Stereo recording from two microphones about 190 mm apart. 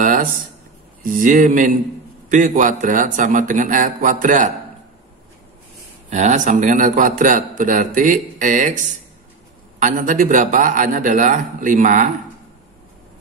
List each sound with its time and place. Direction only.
0.0 s a sound: 45° right (ahead or behind)
1.0 s a man's voice: 45° right (ahead or behind)
6.0 s a man's voice: 40° right (ahead or behind)